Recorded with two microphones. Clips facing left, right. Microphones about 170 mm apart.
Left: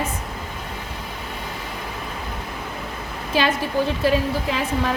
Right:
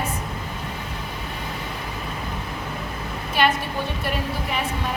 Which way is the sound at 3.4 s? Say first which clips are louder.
Left 2 dB; 90° left.